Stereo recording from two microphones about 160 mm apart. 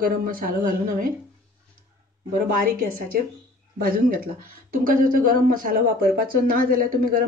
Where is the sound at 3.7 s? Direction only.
65° right (ahead or behind).